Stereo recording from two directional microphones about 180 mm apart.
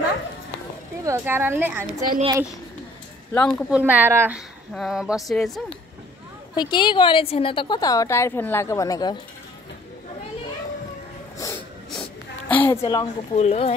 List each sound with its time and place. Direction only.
1.0 s speech: 15° right (ahead or behind)
1.9 s speech: 40° right (ahead or behind)
3.7 s speech: 10° right (ahead or behind)
6.5 s a woman's voice: 25° left (ahead or behind)
11.4 s a sound: 15° left (ahead or behind)
12.4 s a woman's voice: 10° left (ahead or behind)
12.8 s a woman's voice: 20° left (ahead or behind)
13.3 s speech: 35° left (ahead or behind)